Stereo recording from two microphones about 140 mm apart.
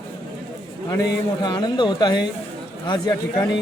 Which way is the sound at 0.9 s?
25° left (ahead or behind).